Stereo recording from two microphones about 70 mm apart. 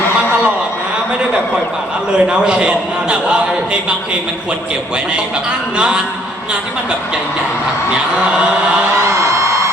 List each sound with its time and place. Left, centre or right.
2.1 s a man's voice: centre
5.7 s a man's voice: centre